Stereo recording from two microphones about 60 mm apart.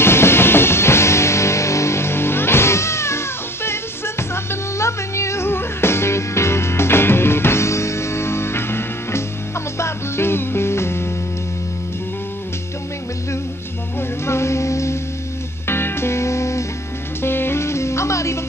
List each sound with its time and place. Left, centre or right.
0.0 s music: left
14.2 s music: left
15.6 s music: left
17.2 s music: left